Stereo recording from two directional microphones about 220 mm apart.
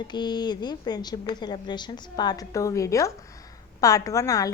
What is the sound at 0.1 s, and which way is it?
A woman's voice, 20° left (ahead or behind).